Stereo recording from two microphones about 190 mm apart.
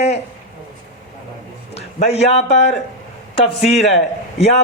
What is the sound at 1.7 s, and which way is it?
A man's voice, 35° left (ahead or behind).